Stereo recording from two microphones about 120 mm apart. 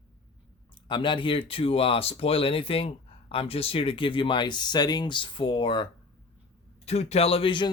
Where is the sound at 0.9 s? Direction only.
45° left (ahead or behind).